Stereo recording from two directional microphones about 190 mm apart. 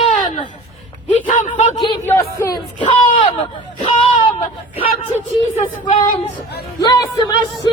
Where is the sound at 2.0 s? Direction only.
15° left (ahead or behind).